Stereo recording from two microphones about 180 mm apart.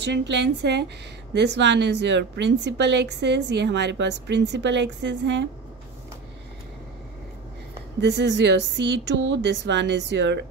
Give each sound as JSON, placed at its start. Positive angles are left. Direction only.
{"t": 0.0, "sound": "a woman's voice", "side_deg": -75}
{"t": 8.0, "sound": "a woman's voice", "side_deg": -75}